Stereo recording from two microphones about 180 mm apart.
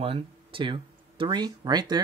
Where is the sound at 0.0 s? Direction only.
30° right (ahead or behind).